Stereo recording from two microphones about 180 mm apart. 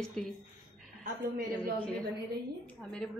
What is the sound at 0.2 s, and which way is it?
Speech, 5° left (ahead or behind).